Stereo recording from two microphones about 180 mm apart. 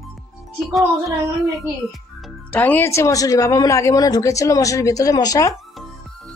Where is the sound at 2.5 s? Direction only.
10° left (ahead or behind).